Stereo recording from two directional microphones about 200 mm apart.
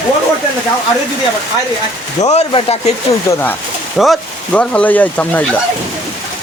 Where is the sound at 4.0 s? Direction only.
5° left (ahead or behind).